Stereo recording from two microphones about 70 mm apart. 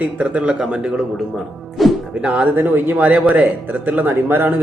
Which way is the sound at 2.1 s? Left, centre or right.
Centre.